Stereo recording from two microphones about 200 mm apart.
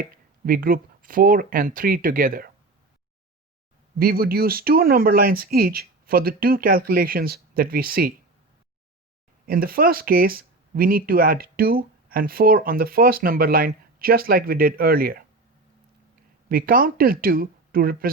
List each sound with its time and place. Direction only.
0.0 s speech: 45° right (ahead or behind)
3.9 s speech: 50° right (ahead or behind)
9.5 s speech: 50° right (ahead or behind)
16.5 s speech: 45° right (ahead or behind)